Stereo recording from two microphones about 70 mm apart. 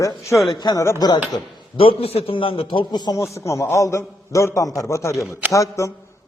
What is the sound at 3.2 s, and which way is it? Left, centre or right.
A man's voice, left.